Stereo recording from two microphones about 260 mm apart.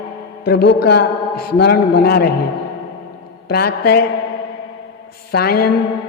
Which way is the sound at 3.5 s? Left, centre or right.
Left.